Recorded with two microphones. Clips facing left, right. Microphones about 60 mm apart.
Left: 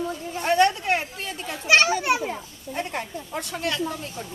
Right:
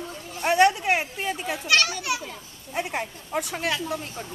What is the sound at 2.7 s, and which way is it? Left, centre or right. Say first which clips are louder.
A woman's voice: even; centre.